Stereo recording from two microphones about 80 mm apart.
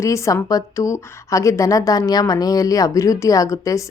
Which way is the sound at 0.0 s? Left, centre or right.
Left.